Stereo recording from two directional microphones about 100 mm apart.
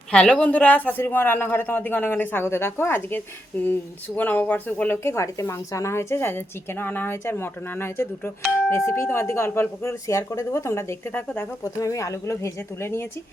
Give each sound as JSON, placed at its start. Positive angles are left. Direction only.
{"t": 0.1, "sound": "speech", "side_deg": 10}
{"t": 11.6, "sound": "speech", "side_deg": 35}